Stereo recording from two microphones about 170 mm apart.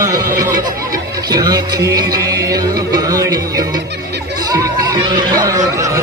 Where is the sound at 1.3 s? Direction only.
20° right (ahead or behind).